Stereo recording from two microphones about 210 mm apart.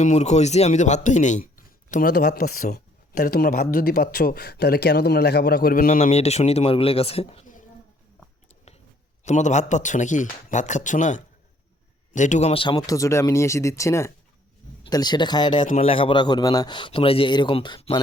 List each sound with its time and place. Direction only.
0.0 s speech: 35° left (ahead or behind)
9.2 s speech: 35° left (ahead or behind)
15.6 s speech: 30° left (ahead or behind)